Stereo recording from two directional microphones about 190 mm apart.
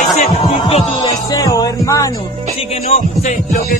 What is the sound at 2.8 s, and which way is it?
Speech, 40° left (ahead or behind).